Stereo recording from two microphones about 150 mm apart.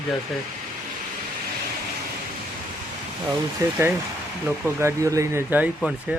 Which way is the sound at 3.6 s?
25° right (ahead or behind).